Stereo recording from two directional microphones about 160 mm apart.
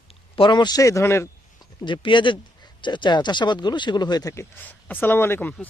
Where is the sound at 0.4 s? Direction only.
30° left (ahead or behind).